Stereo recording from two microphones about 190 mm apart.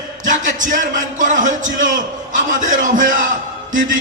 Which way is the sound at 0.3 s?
45° right (ahead or behind).